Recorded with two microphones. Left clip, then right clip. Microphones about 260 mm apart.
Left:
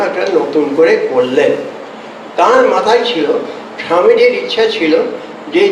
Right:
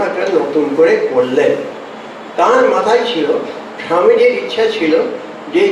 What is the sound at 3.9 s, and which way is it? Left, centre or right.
Speech, centre.